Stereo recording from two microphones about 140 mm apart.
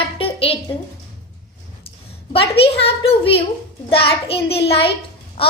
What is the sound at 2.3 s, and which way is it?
A child's voice, 45° left (ahead or behind).